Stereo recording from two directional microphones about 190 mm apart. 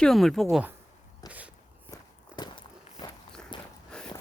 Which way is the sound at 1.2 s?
5° right (ahead or behind).